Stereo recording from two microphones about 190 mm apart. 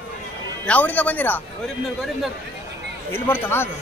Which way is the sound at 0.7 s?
10° left (ahead or behind).